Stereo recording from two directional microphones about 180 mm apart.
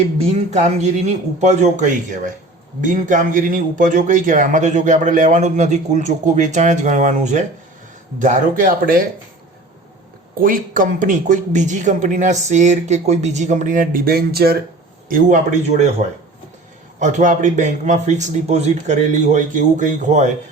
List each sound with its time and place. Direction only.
0.5 s a man's voice: 40° right (ahead or behind)
10.3 s a man's voice: 50° right (ahead or behind)
15.1 s speech: 45° right (ahead or behind)